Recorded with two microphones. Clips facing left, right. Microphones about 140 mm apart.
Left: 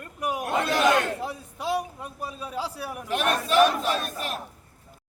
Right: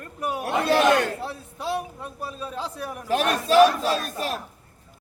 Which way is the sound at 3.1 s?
35° right (ahead or behind).